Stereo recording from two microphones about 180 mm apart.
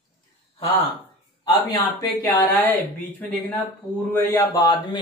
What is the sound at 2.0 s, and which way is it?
Speech, 5° left (ahead or behind).